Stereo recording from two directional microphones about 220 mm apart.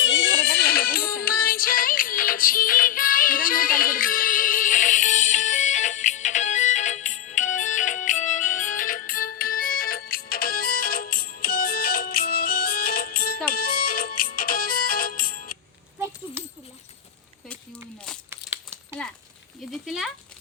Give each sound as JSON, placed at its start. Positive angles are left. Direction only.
{"t": 0.0, "sound": "music", "side_deg": 55}
{"t": 16.4, "sound": "horse", "side_deg": -10}
{"t": 18.3, "sound": "crumpling", "side_deg": -10}
{"t": 19.7, "sound": "a sound", "side_deg": 0}